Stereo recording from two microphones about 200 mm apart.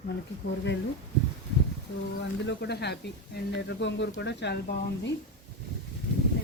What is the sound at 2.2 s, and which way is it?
Speech, 55° left (ahead or behind).